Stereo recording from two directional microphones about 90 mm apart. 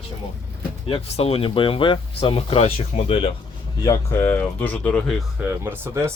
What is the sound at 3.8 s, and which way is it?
Speech, 35° left (ahead or behind).